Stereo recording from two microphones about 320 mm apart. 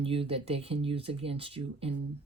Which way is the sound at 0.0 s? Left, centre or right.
Centre.